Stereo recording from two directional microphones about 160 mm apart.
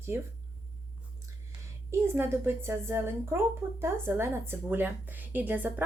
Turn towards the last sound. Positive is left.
turn(degrees=-10)  # may be behind; listen again after turning